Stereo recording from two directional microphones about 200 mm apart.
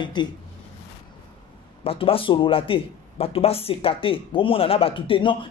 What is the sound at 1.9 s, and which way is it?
Speech, 25° left (ahead or behind).